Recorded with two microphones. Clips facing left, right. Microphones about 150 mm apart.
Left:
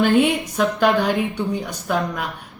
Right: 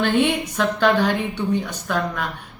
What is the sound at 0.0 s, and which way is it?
Speech, 10° left (ahead or behind).